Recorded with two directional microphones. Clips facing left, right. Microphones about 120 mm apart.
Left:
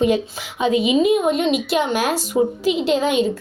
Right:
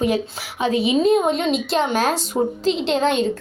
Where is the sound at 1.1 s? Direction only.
5° left (ahead or behind).